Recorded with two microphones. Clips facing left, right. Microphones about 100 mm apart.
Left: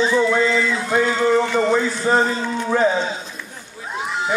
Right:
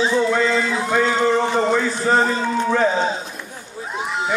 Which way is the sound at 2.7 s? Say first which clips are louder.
Left 2 dB; 15° left (ahead or behind).